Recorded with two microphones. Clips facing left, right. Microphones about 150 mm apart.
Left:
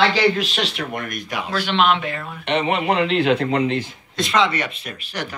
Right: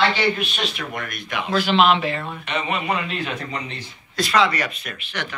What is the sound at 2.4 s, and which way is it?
Speech, 60° left (ahead or behind).